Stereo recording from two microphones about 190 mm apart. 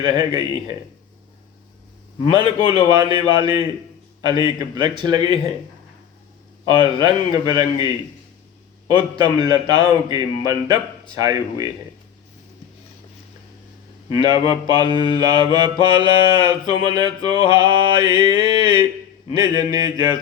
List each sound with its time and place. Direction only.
0.0 s mantra: 25° right (ahead or behind)
2.2 s mantra: 25° right (ahead or behind)
6.7 s mantra: 20° right (ahead or behind)
9.0 s mantra: 25° right (ahead or behind)
14.2 s mantra: 25° right (ahead or behind)